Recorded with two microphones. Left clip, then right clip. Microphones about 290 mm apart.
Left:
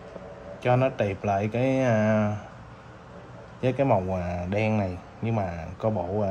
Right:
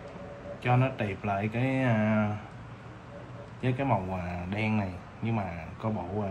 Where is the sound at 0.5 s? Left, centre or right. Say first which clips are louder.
Left 6 dB; left.